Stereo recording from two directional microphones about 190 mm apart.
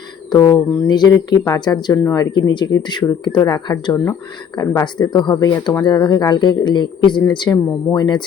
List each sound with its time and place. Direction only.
0.3 s speech: 20° left (ahead or behind)